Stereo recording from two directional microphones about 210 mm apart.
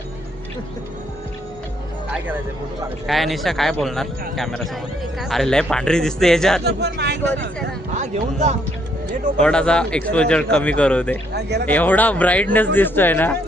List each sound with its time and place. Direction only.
3.1 s speech: centre (ahead or behind)
6.7 s speech: 55° right (ahead or behind)
7.9 s speech: 35° right (ahead or behind)
9.4 s speech: 5° left (ahead or behind)
11.3 s speech: 55° right (ahead or behind)
11.6 s speech: 10° left (ahead or behind)